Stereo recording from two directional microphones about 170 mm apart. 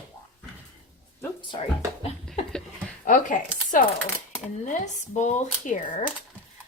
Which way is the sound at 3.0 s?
50° left (ahead or behind).